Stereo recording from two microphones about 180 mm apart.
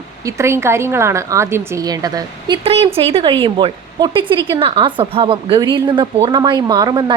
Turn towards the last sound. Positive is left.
turn(degrees=-25)  # may be behind; listen again after turning